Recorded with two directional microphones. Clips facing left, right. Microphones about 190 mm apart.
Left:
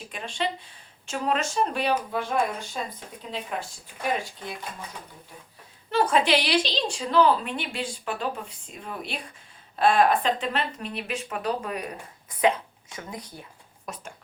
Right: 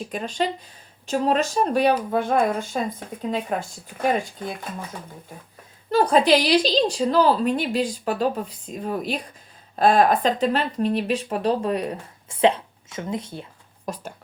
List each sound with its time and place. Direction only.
0.1 s a woman's voice: 40° right (ahead or behind)
5.9 s a woman's voice: 35° right (ahead or behind)
13.8 s speech: 35° right (ahead or behind)